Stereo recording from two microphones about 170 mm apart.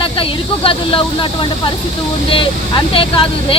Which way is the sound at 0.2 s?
30° left (ahead or behind).